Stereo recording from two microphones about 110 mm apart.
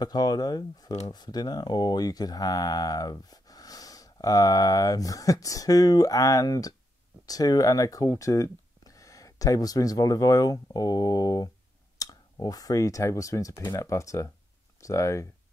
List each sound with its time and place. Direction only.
0.0 s speech: 40° left (ahead or behind)